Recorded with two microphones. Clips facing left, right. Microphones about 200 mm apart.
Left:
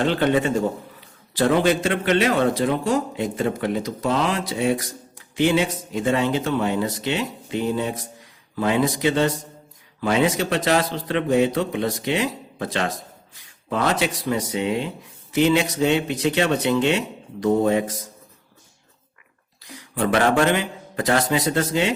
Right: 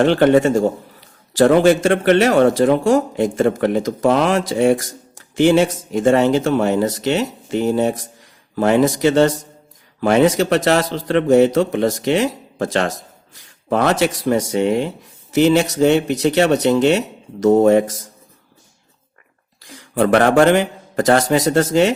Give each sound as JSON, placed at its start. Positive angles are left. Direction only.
{"t": 0.2, "sound": "speech", "side_deg": -45}
{"t": 13.7, "sound": "speech", "side_deg": -70}
{"t": 13.9, "sound": "speech", "side_deg": -45}
{"t": 19.6, "sound": "a man's voice", "side_deg": -50}